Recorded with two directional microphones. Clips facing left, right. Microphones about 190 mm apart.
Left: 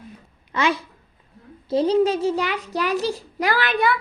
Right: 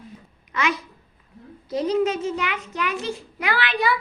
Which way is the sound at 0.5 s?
30° left (ahead or behind).